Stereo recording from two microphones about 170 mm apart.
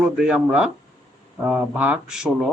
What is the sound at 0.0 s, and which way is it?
Speech, 5° right (ahead or behind).